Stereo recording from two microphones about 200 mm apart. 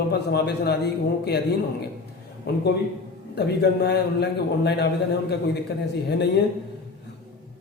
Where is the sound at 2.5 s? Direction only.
55° left (ahead or behind).